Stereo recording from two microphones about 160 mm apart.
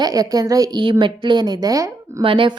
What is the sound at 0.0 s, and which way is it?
A woman's voice, 20° right (ahead or behind).